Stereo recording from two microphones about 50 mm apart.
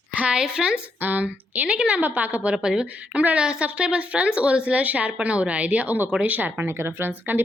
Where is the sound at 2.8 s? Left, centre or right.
Right.